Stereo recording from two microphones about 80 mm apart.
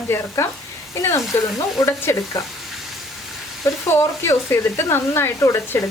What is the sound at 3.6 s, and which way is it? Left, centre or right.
Speech, left.